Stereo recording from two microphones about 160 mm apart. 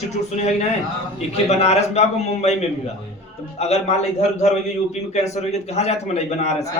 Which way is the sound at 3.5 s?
40° left (ahead or behind).